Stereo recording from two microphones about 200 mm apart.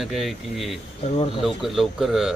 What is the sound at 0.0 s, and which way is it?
A man's voice, centre (ahead or behind).